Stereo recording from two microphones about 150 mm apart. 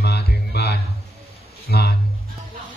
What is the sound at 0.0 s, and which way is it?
Music, 90° left.